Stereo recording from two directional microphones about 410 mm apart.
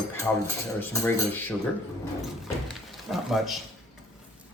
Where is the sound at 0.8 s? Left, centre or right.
Centre.